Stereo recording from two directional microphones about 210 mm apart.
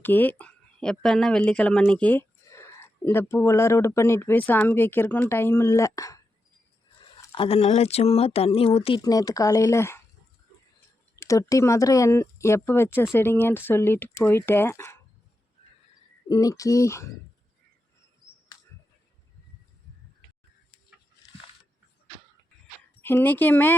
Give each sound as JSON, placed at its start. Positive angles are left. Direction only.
{"t": 0.0, "sound": "speech", "side_deg": 10}
{"t": 7.2, "sound": "speech", "side_deg": 25}
{"t": 11.2, "sound": "speech", "side_deg": 15}
{"t": 16.3, "sound": "speech", "side_deg": 15}
{"t": 23.0, "sound": "speech", "side_deg": 10}